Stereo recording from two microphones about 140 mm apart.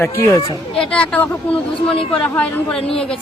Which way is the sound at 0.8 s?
10° left (ahead or behind).